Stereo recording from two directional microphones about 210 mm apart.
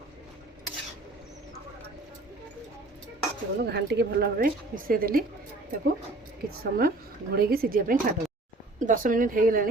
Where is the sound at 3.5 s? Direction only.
50° right (ahead or behind).